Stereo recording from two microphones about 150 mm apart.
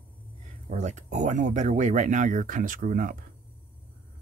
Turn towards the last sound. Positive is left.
turn(degrees=-65)  # may be behind; listen again after turning